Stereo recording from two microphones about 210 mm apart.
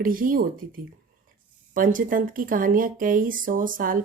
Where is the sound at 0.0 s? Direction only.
40° right (ahead or behind).